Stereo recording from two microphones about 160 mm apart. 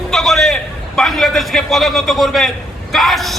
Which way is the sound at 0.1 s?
Centre (ahead or behind).